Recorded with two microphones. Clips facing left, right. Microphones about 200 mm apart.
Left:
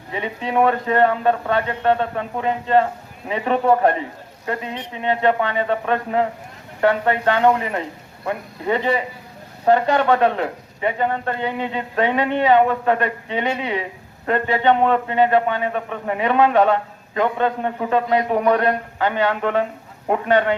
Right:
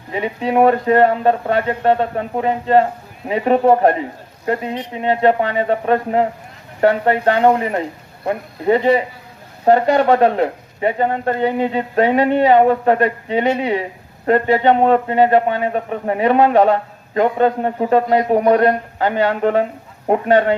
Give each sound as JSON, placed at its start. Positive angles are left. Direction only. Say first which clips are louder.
{"t": 0.1, "sound": "a man's voice", "louder": "right 5 dB", "side_deg": -35}